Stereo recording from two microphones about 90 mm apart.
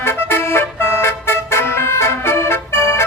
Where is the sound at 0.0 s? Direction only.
25° left (ahead or behind).